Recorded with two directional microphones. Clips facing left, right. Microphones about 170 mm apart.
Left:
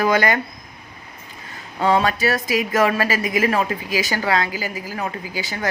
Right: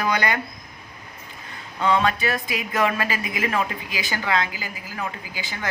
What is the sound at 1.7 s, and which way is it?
A woman's voice, 40° left (ahead or behind).